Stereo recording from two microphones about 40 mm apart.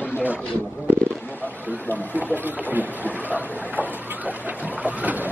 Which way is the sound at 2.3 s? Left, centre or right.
Right.